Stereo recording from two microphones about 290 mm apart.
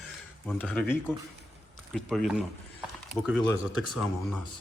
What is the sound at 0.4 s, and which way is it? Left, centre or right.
Speech, centre.